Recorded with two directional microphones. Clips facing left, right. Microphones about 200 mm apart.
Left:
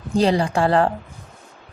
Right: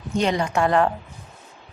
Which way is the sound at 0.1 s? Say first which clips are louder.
Left 4 dB; 35° left (ahead or behind).